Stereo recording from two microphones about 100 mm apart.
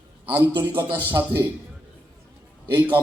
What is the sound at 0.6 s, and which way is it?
Speech, 25° right (ahead or behind).